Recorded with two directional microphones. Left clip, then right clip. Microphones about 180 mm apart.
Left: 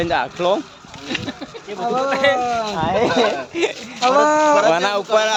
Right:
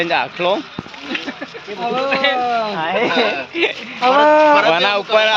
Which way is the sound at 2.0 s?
10° left (ahead or behind).